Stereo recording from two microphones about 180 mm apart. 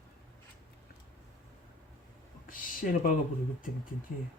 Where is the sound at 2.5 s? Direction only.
50° left (ahead or behind).